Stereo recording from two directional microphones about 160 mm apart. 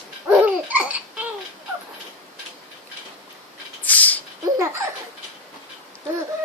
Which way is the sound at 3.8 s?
10° left (ahead or behind).